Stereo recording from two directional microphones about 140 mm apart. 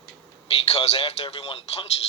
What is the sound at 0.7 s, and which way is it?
Speech, 45° left (ahead or behind).